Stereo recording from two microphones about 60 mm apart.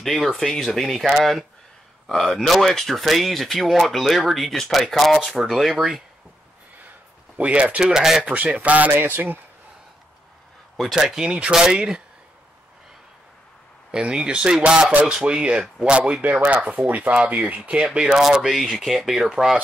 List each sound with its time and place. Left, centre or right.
0.0 s speech: centre
7.3 s speech: right
8.2 s a man's voice: right
11.0 s speech: centre
13.9 s speech: centre
14.9 s speech: right
15.1 s speech: centre